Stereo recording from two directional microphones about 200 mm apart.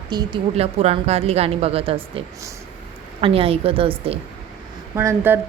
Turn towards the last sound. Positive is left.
turn(degrees=-10)  # may be behind; listen again after turning